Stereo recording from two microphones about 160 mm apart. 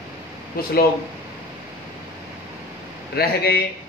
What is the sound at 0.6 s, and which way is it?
Speech, 75° left (ahead or behind).